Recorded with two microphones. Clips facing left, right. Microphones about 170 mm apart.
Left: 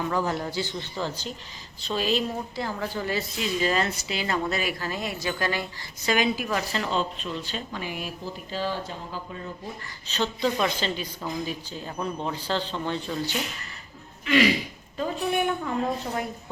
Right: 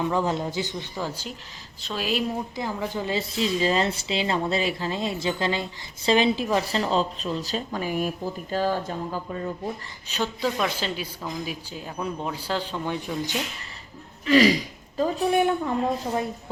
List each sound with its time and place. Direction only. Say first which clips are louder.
0.0 s speech: right 2 dB; 20° right (ahead or behind); by 2.2 s 5° right (ahead or behind)
2.6 s a woman's voice: right 1 dB; 15° right (ahead or behind); by 9.0 s 45° right (ahead or behind)
10.1 s speech: left 1 dB; 10° right (ahead or behind)
14.3 s speech: right 3 dB; 35° right (ahead or behind)